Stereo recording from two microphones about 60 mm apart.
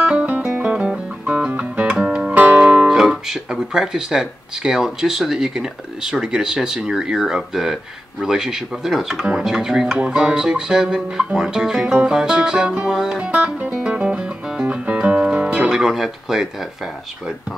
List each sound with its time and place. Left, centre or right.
0.0 s music: centre
2.0 s music: centre
2.5 s guitar: centre
2.9 s speech: centre
13.7 s music: centre